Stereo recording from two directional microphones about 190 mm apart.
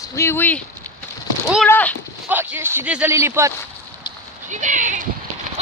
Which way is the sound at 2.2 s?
10° right (ahead or behind).